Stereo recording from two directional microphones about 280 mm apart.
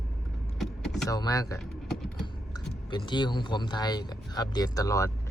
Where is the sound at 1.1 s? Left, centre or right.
Centre.